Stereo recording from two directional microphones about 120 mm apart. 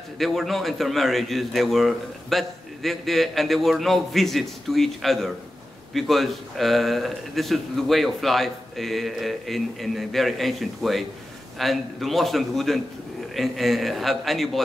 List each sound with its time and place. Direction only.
0.2 s a man's voice: centre (ahead or behind)